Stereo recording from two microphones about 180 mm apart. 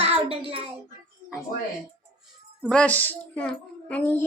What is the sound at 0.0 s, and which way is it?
Child singing, 30° right (ahead or behind).